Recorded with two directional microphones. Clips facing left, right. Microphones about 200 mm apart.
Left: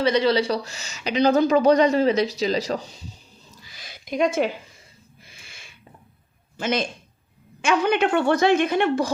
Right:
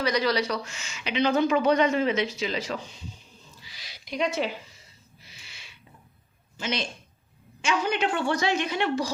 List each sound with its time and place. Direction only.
0.0 s speech: 30° left (ahead or behind)
3.6 s a sound: 50° left (ahead or behind)
6.6 s a man's voice: 50° left (ahead or behind)